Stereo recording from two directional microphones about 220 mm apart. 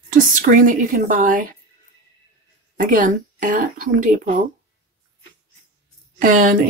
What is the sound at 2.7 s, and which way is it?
Speech, 35° right (ahead or behind).